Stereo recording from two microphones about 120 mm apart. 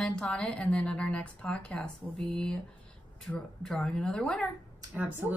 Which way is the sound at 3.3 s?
20° left (ahead or behind).